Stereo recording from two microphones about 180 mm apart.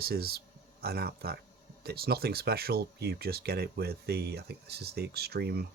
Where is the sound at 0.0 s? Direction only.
60° right (ahead or behind).